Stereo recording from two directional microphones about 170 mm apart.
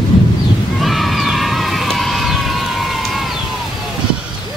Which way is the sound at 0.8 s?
Centre (ahead or behind).